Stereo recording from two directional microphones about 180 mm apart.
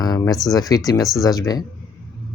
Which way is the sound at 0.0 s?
20° left (ahead or behind).